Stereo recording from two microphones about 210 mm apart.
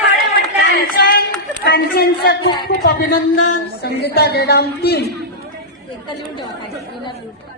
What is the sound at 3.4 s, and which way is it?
Speech, 50° left (ahead or behind).